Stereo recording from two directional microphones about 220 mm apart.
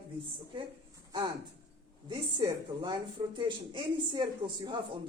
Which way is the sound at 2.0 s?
20° right (ahead or behind).